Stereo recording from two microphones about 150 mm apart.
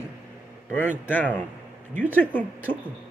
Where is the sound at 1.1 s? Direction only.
10° left (ahead or behind).